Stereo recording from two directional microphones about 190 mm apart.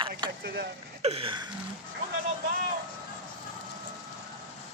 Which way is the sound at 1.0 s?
30° right (ahead or behind).